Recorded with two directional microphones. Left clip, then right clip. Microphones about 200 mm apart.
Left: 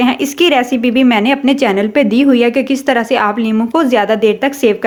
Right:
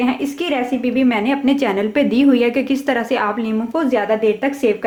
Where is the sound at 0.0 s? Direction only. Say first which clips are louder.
Left 8 dB; 40° left (ahead or behind).